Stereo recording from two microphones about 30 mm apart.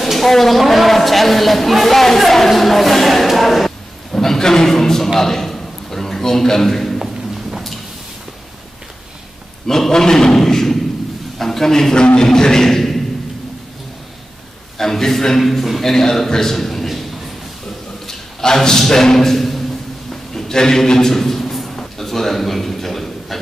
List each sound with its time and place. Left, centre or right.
0.0 s a woman's voice: centre
4.1 s a man's voice: centre
9.7 s a man's voice: centre
14.8 s a man's voice: centre
16.5 s a sound: centre
18.0 s a man's voice: centre
20.3 s a man's voice: left
21.5 s a sound: centre
21.9 s a sound: centre